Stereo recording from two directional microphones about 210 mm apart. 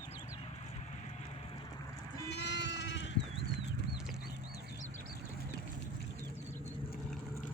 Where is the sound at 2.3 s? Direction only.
55° left (ahead or behind).